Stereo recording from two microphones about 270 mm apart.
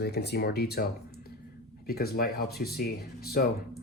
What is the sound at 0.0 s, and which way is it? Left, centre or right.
Speech, left.